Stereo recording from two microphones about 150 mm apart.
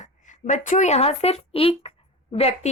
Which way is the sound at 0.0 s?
55° left (ahead or behind).